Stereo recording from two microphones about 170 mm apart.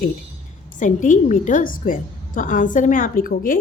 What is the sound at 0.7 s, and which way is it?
A woman's voice, 50° left (ahead or behind).